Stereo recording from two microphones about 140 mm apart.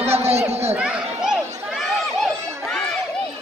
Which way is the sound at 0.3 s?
50° right (ahead or behind).